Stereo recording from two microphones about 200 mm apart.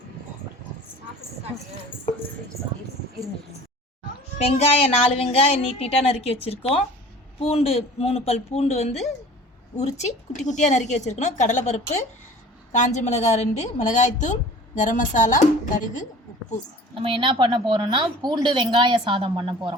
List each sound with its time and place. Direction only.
4.4 s a child's voice: 30° left (ahead or behind)
16.9 s speech: 25° right (ahead or behind)